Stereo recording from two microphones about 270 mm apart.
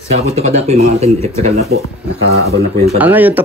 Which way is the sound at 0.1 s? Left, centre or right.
Right.